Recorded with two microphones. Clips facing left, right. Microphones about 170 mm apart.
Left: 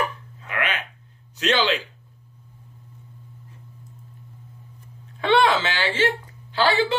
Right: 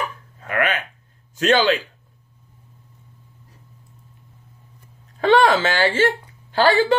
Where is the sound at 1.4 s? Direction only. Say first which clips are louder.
Right 5 dB; 45° right (ahead or behind).